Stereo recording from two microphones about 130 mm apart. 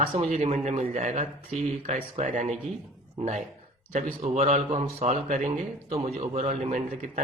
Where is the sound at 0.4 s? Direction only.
60° right (ahead or behind).